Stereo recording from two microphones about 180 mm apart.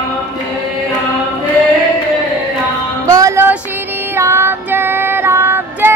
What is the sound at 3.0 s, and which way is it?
Music, 15° right (ahead or behind).